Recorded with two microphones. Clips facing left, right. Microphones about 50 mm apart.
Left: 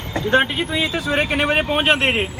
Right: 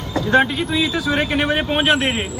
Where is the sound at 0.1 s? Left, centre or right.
Left.